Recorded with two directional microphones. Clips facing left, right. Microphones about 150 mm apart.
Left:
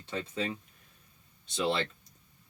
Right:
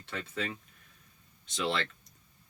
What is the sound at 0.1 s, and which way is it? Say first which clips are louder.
Speech: left 3 dB; 25° left (ahead or behind).